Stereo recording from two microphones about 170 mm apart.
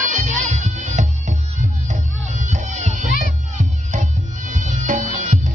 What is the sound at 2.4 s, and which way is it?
Music, 45° right (ahead or behind).